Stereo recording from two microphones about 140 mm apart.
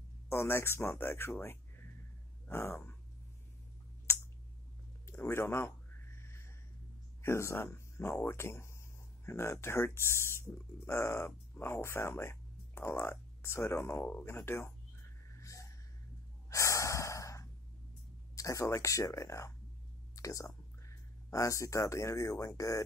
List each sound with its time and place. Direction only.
0.3 s speech: 15° left (ahead or behind)
4.1 s a sound: 20° left (ahead or behind)
7.2 s speech: 20° left (ahead or behind)
15.3 s a sound: 20° left (ahead or behind)
16.4 s snort: 20° left (ahead or behind)
18.3 s speech: 25° left (ahead or behind)